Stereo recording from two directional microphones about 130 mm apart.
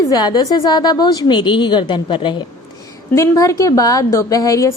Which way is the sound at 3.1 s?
25° left (ahead or behind).